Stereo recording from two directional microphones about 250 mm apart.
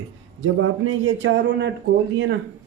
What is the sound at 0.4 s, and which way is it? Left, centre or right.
Speech, right.